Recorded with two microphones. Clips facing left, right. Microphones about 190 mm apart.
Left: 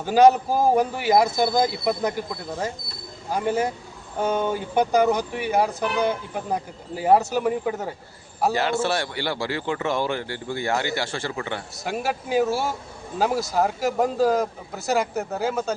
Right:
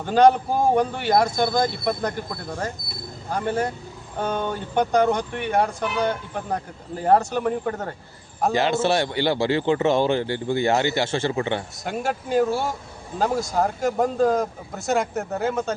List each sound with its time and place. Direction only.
0.0 s speech: 5° left (ahead or behind)
8.5 s a man's voice: 20° right (ahead or behind)
11.9 s speech: 5° left (ahead or behind)